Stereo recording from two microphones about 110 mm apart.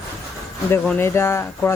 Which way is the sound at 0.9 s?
25° left (ahead or behind).